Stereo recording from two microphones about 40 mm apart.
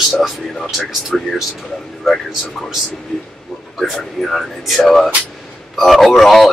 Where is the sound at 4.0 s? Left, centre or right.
Centre.